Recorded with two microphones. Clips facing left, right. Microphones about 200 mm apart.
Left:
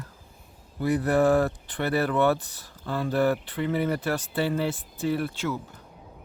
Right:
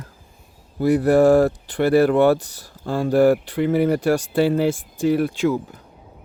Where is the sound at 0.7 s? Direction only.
35° right (ahead or behind).